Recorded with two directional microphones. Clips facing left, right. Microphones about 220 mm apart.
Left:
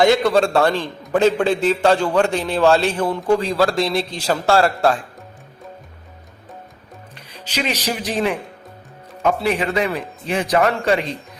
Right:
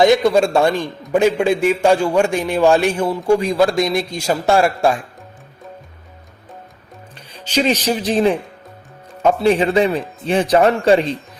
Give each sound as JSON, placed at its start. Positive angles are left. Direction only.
{"t": 0.0, "sound": "a man's voice", "side_deg": -15}
{"t": 7.5, "sound": "speech", "side_deg": -30}
{"t": 9.4, "sound": "a man's voice", "side_deg": -30}